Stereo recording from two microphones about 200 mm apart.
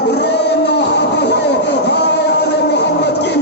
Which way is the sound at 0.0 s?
55° left (ahead or behind).